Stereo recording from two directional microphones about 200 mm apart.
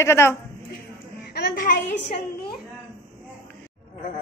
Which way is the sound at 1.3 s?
50° left (ahead or behind).